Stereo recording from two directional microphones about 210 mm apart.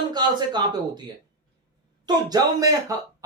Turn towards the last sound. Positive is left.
turn(degrees=-15)  # may be behind; listen again after turning